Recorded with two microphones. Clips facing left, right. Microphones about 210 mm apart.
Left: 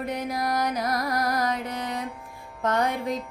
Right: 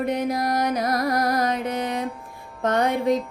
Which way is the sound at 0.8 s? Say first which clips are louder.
Right 4 dB; 50° right (ahead or behind).